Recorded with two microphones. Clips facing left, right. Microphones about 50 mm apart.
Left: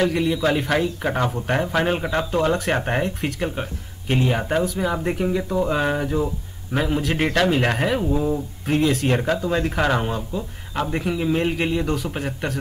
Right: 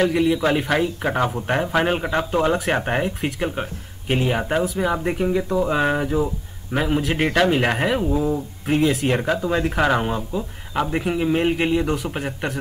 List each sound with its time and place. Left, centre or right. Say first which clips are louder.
0.0 s speech: right 2 dB; centre
11.1 s a man's voice: even; right
11.3 s speech: right 2 dB; centre